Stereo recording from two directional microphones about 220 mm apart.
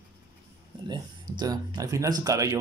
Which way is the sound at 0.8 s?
20° right (ahead or behind).